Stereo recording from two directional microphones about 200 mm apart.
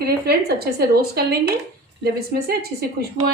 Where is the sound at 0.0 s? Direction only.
50° right (ahead or behind).